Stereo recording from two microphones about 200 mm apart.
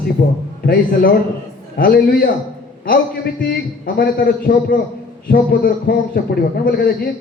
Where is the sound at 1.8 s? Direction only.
50° left (ahead or behind).